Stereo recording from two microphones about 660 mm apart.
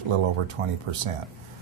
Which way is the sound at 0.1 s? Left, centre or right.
Right.